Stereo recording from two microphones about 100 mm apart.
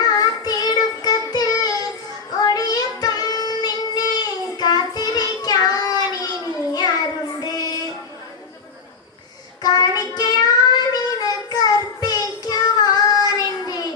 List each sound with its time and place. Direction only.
0.1 s child singing: 40° left (ahead or behind)
7.3 s music: 40° left (ahead or behind)
9.6 s child singing: 40° left (ahead or behind)